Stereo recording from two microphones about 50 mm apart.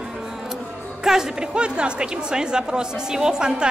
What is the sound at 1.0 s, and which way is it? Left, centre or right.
A woman's voice, centre.